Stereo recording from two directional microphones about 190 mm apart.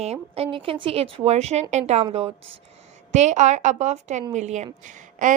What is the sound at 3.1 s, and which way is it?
A woman's voice, 40° right (ahead or behind).